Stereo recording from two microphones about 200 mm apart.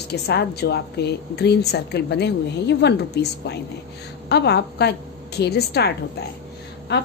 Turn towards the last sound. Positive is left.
turn(degrees=60)  # may be behind; listen again after turning